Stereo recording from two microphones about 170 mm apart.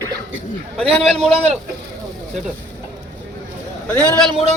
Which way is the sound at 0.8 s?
35° right (ahead or behind).